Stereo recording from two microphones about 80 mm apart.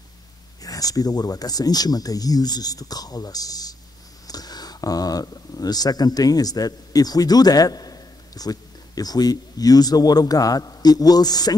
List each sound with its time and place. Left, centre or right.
0.6 s speech: left